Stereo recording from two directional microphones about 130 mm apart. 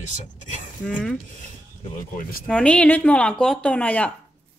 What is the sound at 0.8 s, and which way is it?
Speech, 5° left (ahead or behind).